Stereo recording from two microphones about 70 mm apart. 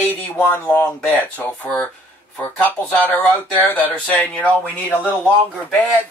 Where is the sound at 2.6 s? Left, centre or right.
Left.